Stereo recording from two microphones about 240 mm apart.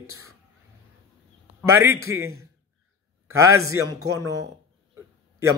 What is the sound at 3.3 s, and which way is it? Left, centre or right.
Speech, centre.